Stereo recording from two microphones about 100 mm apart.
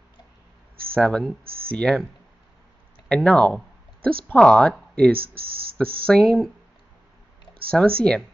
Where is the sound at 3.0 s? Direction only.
10° left (ahead or behind).